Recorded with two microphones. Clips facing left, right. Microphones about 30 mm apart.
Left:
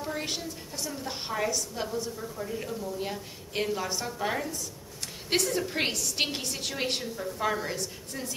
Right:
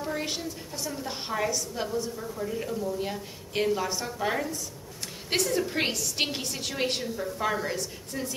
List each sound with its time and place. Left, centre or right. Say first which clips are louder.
0.0 s a woman's voice: right 2 dB; centre